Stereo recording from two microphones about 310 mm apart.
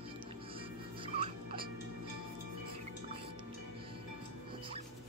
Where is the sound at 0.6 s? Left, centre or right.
Centre.